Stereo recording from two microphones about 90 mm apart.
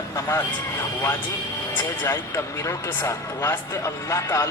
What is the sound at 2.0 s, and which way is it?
A man's voice, 35° left (ahead or behind).